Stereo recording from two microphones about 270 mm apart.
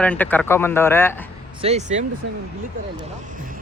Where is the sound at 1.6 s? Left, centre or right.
Right.